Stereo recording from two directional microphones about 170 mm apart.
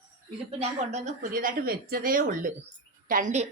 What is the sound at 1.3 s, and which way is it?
A woman's voice, 60° right (ahead or behind).